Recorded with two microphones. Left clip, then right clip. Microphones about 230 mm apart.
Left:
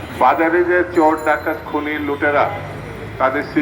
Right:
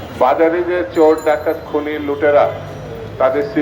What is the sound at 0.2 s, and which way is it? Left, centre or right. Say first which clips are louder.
Speech: right 1 dB; right.